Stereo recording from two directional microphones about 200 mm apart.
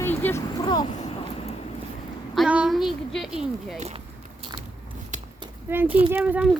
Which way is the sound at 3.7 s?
30° right (ahead or behind).